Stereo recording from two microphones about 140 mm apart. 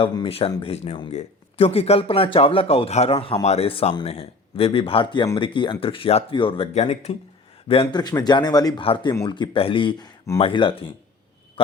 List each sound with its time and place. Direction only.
0.0 s a man's voice: 35° left (ahead or behind)
6.7 s speech: 55° left (ahead or behind)
7.7 s a man's voice: 35° left (ahead or behind)
8.8 s a man's voice: 40° left (ahead or behind)
9.1 s a man's voice: 30° left (ahead or behind)